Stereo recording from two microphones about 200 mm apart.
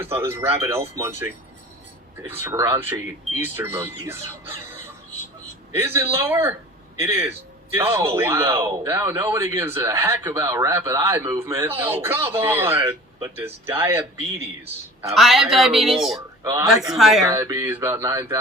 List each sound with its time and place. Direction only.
0.0 s speech: 15° right (ahead or behind)
2.4 s speech: 10° right (ahead or behind)
15.1 s speech: centre (ahead or behind)
16.4 s a man's voice: 15° right (ahead or behind)
16.9 s speech: centre (ahead or behind)
17.2 s speech: 15° right (ahead or behind)